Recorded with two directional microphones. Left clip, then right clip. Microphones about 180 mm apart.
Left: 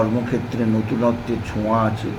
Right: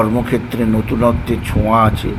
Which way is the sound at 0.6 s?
20° right (ahead or behind).